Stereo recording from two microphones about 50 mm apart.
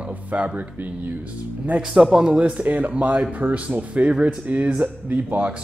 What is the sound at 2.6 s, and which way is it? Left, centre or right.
Speech, right.